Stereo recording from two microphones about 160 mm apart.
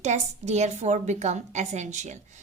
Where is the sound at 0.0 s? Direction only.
45° right (ahead or behind).